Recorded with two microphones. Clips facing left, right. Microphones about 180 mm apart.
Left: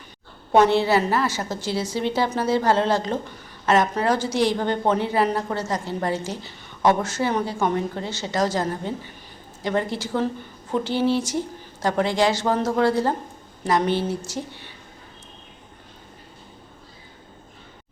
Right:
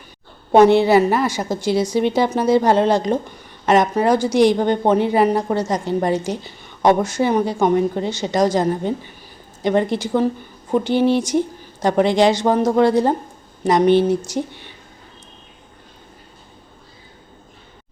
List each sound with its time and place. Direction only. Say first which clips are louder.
0.5 s a woman's voice: right 6 dB; 15° right (ahead or behind)